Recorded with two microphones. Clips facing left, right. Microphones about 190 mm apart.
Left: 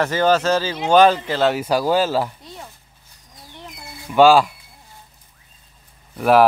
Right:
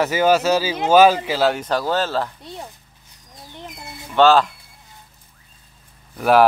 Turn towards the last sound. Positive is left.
turn(degrees=0)  # may be behind; listen again after turning